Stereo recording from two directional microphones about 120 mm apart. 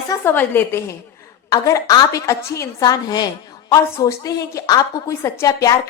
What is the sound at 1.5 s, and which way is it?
A woman's voice, 30° left (ahead or behind).